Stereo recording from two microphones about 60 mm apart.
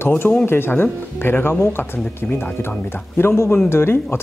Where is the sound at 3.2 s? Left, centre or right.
Left.